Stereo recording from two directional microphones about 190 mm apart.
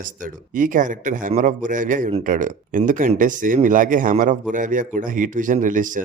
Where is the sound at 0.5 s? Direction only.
45° right (ahead or behind).